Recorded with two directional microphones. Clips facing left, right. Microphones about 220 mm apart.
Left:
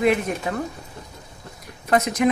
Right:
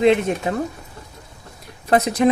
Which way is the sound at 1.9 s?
35° right (ahead or behind).